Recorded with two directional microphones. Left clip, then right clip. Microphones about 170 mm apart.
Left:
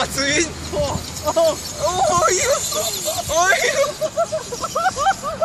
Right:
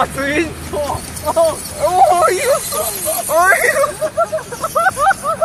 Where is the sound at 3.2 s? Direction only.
35° right (ahead or behind).